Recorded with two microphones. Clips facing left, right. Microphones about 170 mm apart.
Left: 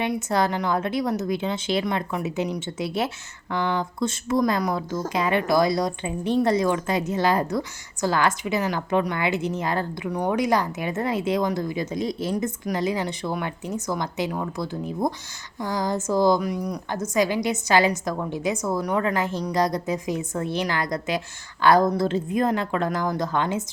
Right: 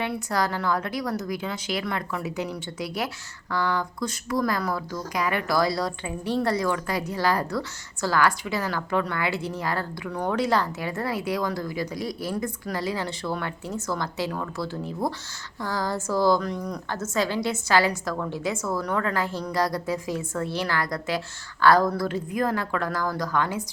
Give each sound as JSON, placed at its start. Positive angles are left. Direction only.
{"t": 0.0, "sound": "a woman's voice", "side_deg": 20}